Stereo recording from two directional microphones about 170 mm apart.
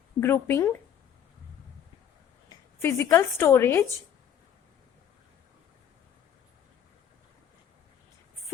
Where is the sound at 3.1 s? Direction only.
15° left (ahead or behind).